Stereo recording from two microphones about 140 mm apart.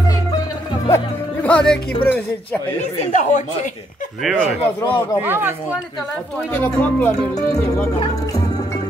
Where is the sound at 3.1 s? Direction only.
60° left (ahead or behind).